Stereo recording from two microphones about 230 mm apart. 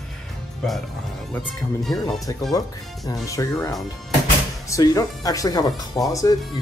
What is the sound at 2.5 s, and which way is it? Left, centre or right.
Speech, centre.